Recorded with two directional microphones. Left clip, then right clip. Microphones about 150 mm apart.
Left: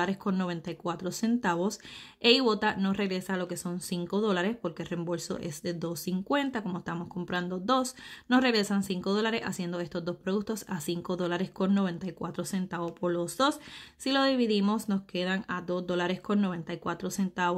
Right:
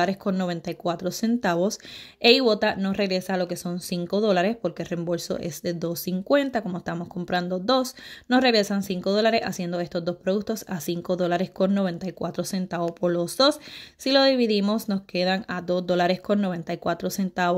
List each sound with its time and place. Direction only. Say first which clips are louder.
0.0 s speech: right 6 dB; 20° right (ahead or behind)